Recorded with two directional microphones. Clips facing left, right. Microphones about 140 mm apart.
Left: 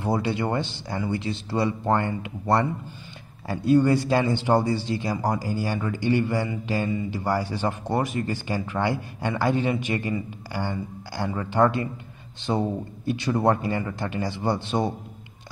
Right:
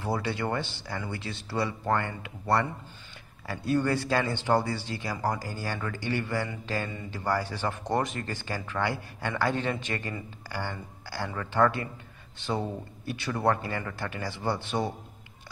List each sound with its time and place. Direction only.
0.0 s speech: 15° left (ahead or behind)